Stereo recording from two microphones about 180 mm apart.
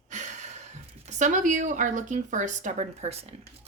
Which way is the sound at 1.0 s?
40° right (ahead or behind).